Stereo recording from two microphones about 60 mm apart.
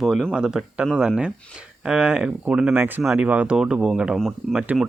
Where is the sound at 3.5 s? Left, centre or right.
Centre.